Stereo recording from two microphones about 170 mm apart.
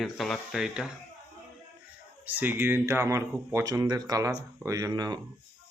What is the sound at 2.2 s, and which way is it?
Speech, 10° right (ahead or behind).